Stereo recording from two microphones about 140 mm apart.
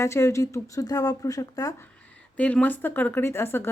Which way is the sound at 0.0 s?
20° left (ahead or behind).